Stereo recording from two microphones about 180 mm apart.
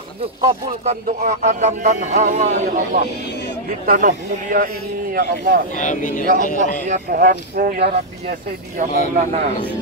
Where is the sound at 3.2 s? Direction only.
70° left (ahead or behind).